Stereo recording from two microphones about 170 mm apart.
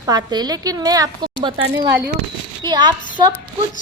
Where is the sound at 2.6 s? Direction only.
25° right (ahead or behind).